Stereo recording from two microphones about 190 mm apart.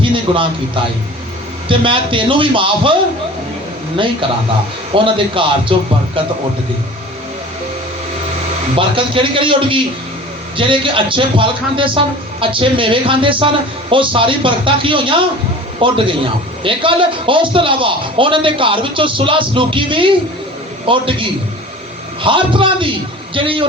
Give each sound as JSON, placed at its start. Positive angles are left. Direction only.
{"t": 0.0, "sound": "a sound", "side_deg": -25}
{"t": 1.6, "sound": "a man's voice", "side_deg": -25}
{"t": 4.9, "sound": "a man's voice", "side_deg": -25}
{"t": 8.7, "sound": "a man's voice", "side_deg": -25}